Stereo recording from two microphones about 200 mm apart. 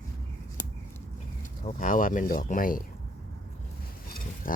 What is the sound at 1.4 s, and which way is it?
Speech, 40° left (ahead or behind).